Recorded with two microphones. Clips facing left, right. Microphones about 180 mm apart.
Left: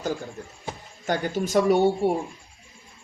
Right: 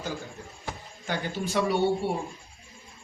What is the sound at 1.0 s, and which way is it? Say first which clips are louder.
Speech: left 5 dB; 45° left (ahead or behind).